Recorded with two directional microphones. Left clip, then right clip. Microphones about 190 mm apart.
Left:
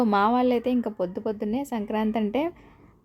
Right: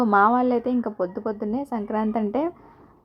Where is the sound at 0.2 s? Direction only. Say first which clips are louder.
Right 4 dB; 5° left (ahead or behind).